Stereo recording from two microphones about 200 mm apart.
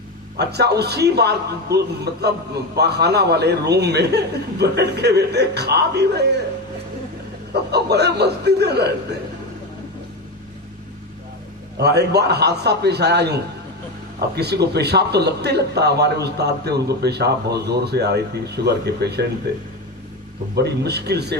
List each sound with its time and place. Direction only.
0.3 s speech: 55° right (ahead or behind)
7.7 s speech: 55° right (ahead or behind)
11.8 s speech: 55° right (ahead or behind)
20.6 s speech: 55° right (ahead or behind)